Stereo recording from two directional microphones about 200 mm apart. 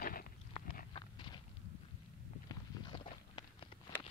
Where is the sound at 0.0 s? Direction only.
45° left (ahead or behind).